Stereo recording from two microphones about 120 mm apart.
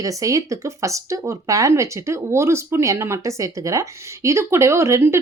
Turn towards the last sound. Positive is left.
turn(degrees=-25)  # may be behind; listen again after turning